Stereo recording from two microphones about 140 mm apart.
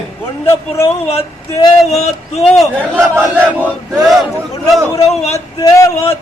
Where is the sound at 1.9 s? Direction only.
50° left (ahead or behind).